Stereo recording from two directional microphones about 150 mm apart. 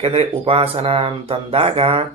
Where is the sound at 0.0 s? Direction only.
40° right (ahead or behind).